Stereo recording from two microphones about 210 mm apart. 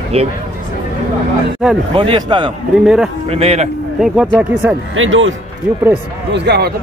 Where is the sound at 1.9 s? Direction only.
25° right (ahead or behind).